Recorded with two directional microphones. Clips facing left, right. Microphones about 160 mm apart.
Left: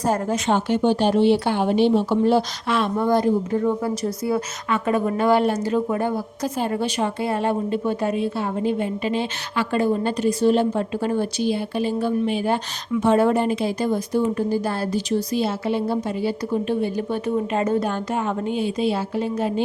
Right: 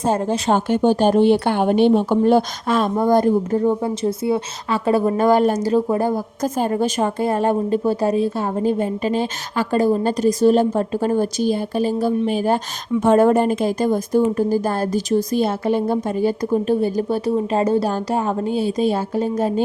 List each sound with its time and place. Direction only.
0.0 s speech: 25° right (ahead or behind)
0.5 s speech: 45° right (ahead or behind)
3.6 s speech: 30° right (ahead or behind)